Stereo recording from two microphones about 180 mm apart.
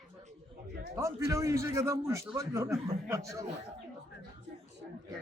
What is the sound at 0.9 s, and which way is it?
A man's voice, 15° right (ahead or behind).